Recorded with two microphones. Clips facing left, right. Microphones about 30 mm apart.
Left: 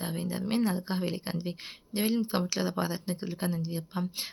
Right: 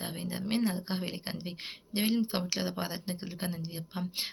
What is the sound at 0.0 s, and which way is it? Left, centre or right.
Speech, right.